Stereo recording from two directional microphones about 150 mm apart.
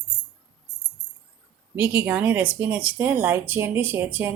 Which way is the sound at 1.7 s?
15° right (ahead or behind).